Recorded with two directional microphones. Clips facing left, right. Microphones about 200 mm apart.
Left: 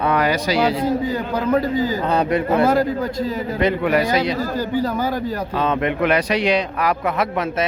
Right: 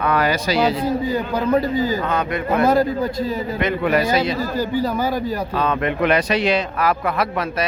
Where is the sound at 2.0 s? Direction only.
35° left (ahead or behind).